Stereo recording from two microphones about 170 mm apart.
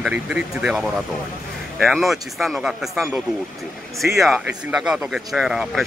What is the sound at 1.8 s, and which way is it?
Speech, centre (ahead or behind).